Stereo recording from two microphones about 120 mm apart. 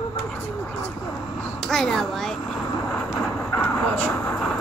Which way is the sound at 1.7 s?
5° left (ahead or behind).